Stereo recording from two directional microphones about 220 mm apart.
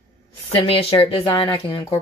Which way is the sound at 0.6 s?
25° left (ahead or behind).